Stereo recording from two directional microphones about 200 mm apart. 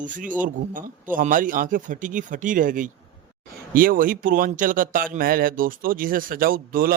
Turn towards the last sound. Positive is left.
turn(degrees=-45)  # may be behind; listen again after turning